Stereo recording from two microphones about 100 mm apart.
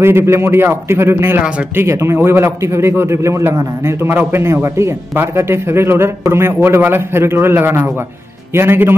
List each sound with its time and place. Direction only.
0.0 s a man's voice: 25° right (ahead or behind)